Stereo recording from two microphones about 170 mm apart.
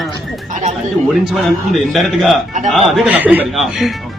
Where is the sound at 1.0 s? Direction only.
Centre (ahead or behind).